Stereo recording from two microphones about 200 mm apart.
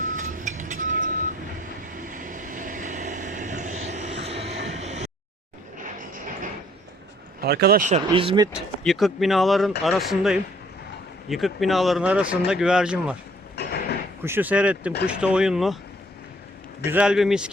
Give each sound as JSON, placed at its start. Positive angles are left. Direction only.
{"t": 0.0, "sound": "vehicle", "side_deg": -40}
{"t": 5.8, "sound": "a sound", "side_deg": -45}
{"t": 7.4, "sound": "speech", "side_deg": -55}
{"t": 8.0, "sound": "speech", "side_deg": -25}
{"t": 8.5, "sound": "speech", "side_deg": 0}
{"t": 13.6, "sound": "a sound", "side_deg": 55}
{"t": 14.2, "sound": "speech", "side_deg": -10}
{"t": 16.9, "sound": "speech", "side_deg": -5}